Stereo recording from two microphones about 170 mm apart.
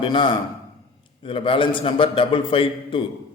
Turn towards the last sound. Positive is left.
turn(degrees=30)  # may be behind; listen again after turning